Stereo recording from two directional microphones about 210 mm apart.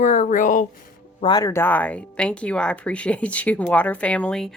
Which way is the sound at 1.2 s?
15° left (ahead or behind).